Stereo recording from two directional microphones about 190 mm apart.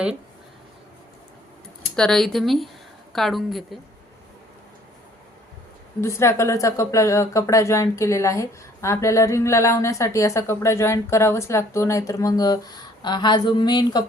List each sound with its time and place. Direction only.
2.0 s speech: 5° left (ahead or behind)
6.0 s speech: 15° left (ahead or behind)